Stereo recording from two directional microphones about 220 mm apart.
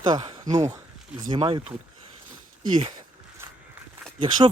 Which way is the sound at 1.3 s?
20° right (ahead or behind).